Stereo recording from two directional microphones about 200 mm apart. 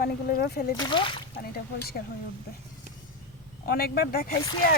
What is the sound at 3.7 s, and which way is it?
Speech, 50° left (ahead or behind).